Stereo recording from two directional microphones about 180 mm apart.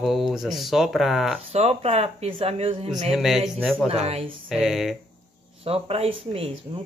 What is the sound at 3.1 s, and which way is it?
Speech, centre (ahead or behind).